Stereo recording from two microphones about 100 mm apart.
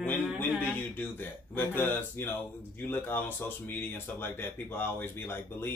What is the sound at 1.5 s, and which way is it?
Speech, 20° left (ahead or behind).